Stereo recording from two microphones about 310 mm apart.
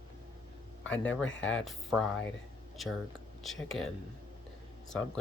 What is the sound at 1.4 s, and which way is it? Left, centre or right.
Speech, centre.